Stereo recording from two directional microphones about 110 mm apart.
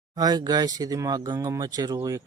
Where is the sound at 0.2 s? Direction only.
35° right (ahead or behind).